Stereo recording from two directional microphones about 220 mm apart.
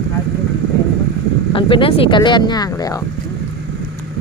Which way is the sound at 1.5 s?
25° left (ahead or behind).